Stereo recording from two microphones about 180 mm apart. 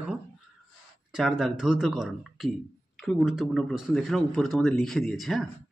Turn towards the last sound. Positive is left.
turn(degrees=0)  # may be behind; listen again after turning